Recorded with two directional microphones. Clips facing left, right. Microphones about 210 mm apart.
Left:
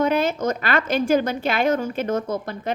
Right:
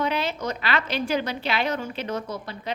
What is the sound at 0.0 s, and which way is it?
A woman's voice, 45° left (ahead or behind).